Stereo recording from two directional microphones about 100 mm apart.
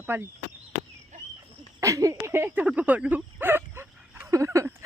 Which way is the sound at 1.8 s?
30° right (ahead or behind).